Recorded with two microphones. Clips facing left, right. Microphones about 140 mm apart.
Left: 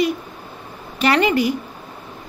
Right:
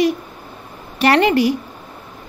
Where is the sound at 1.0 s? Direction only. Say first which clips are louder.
Right 3 dB; 50° right (ahead or behind).